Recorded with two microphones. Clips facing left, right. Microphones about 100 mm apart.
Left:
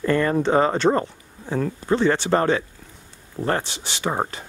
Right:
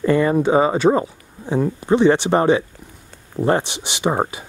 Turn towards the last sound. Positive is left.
turn(degrees=-15)  # may be behind; listen again after turning